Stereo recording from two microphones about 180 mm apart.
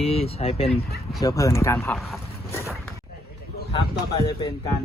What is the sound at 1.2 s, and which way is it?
Speech, 20° left (ahead or behind).